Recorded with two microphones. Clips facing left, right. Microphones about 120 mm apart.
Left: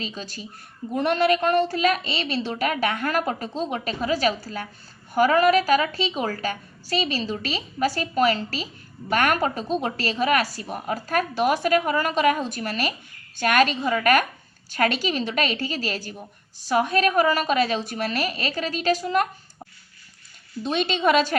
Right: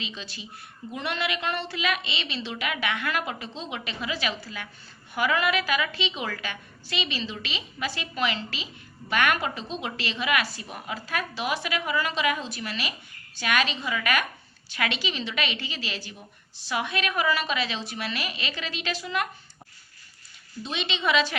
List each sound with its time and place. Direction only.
0.0 s a woman's voice: 45° left (ahead or behind)
20.7 s a woman's voice: 45° left (ahead or behind)